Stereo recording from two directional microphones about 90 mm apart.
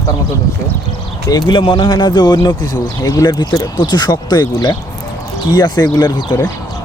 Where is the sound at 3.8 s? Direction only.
55° left (ahead or behind).